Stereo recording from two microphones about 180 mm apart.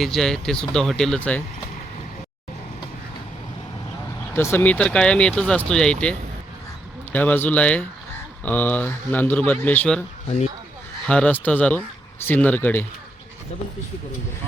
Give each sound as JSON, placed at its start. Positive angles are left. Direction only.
{"t": 0.0, "sound": "speech", "side_deg": 0}
{"t": 4.4, "sound": "speech", "side_deg": 10}
{"t": 10.2, "sound": "speech", "side_deg": 40}
{"t": 11.0, "sound": "speech", "side_deg": 5}